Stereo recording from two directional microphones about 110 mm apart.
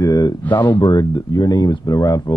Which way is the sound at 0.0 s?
35° left (ahead or behind).